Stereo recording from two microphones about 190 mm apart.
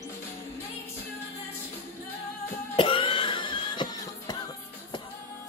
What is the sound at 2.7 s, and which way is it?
Throat clearing, 25° left (ahead or behind).